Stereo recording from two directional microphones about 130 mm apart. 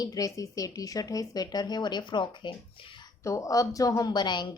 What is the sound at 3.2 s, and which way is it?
A woman's voice, 25° left (ahead or behind).